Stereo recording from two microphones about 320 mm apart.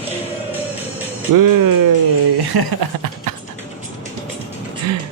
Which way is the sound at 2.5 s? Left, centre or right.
Right.